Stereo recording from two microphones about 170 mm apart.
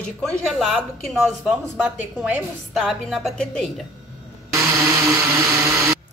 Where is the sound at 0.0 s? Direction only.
Centre (ahead or behind).